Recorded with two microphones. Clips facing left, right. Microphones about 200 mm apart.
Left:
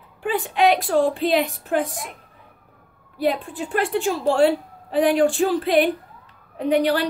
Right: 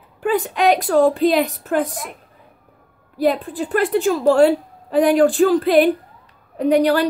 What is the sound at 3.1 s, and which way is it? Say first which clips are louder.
A woman's voice: right 4 dB; 40° right (ahead or behind).